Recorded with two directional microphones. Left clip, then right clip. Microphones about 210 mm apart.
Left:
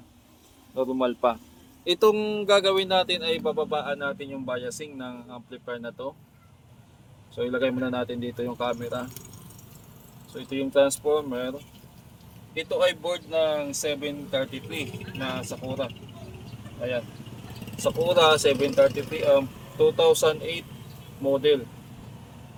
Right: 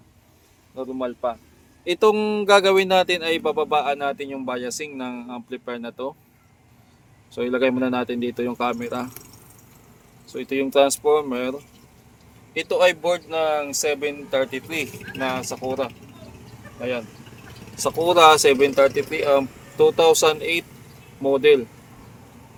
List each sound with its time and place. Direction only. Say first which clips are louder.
0.8 s speech: left 2 dB; 5° left (ahead or behind)
1.8 s speech: right 2 dB; 10° right (ahead or behind)
2.1 s speech: right 5 dB; 30° right (ahead or behind)
7.3 s speech: right 5 dB; 45° right (ahead or behind)
10.3 s speech: right 4 dB; 50° right (ahead or behind)
12.5 s speech: right 6 dB; 55° right (ahead or behind)
17.7 s speech: right 5 dB; 50° right (ahead or behind)